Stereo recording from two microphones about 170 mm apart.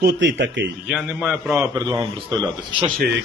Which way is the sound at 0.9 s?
5° right (ahead or behind).